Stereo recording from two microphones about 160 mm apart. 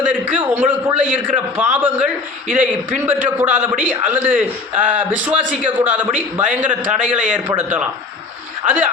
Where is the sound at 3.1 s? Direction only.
10° right (ahead or behind).